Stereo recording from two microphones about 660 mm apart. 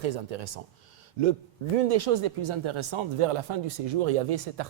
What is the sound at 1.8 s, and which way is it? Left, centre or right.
Speech, right.